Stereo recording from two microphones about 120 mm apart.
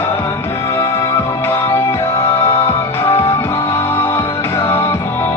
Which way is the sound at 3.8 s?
20° left (ahead or behind).